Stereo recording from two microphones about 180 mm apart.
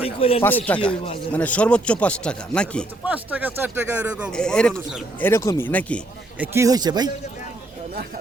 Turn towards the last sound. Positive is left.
turn(degrees=-20)  # may be behind; listen again after turning